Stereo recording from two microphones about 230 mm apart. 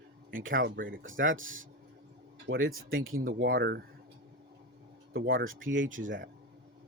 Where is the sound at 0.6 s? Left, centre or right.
Right.